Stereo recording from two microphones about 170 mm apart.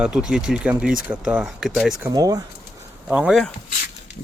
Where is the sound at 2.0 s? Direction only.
20° right (ahead or behind).